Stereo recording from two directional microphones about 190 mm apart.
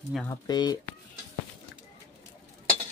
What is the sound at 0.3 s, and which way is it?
Speech, 20° left (ahead or behind).